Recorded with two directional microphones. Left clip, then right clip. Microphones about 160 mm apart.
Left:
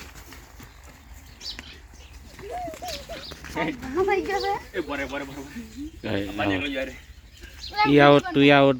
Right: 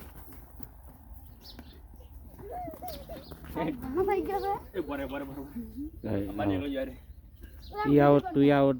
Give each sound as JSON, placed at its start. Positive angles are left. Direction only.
{"t": 3.5, "sound": "speech", "side_deg": 30}
{"t": 4.3, "sound": "speech", "side_deg": 15}
{"t": 6.0, "sound": "speech", "side_deg": 5}
{"t": 7.9, "sound": "speech", "side_deg": 10}
{"t": 8.3, "sound": "speech", "side_deg": 25}